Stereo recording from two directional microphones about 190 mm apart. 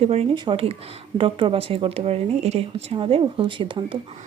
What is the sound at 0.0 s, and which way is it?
Speech, 30° right (ahead or behind).